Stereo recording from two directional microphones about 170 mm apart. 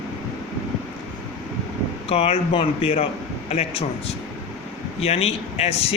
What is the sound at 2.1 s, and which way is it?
Speech, 35° left (ahead or behind).